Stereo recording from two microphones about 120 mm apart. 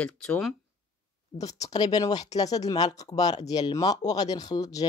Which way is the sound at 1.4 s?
30° left (ahead or behind).